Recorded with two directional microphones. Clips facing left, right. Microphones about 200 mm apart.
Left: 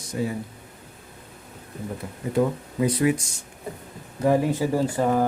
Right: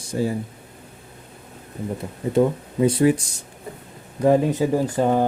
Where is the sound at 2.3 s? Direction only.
25° right (ahead or behind).